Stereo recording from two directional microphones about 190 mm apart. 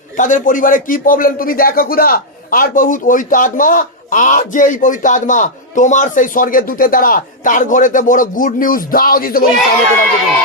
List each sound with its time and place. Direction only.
0.2 s speech: 45° left (ahead or behind)